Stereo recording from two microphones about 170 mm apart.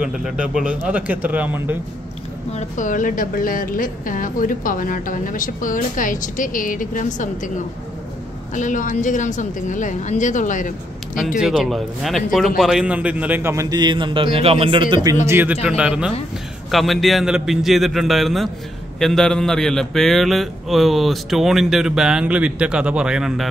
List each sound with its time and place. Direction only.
0.0 s speech: 5° right (ahead or behind)
2.5 s speech: 50° left (ahead or behind)
11.3 s a man's voice: centre (ahead or behind); by 15.0 s 30° right (ahead or behind)
15.2 s a man's voice: 10° right (ahead or behind)